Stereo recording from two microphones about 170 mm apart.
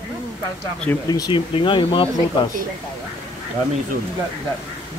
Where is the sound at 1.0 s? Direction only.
25° left (ahead or behind).